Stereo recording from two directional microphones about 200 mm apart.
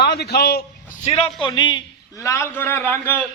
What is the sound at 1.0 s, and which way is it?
A man's voice, 30° left (ahead or behind).